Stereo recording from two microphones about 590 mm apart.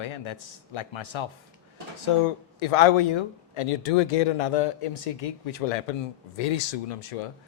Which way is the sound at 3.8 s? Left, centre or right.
Left.